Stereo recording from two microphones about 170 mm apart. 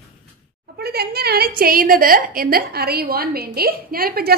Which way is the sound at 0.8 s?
65° right (ahead or behind).